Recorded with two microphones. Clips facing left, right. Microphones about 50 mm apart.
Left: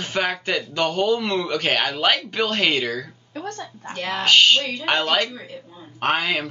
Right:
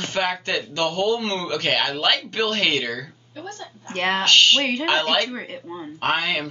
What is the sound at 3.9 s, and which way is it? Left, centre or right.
Speech, right.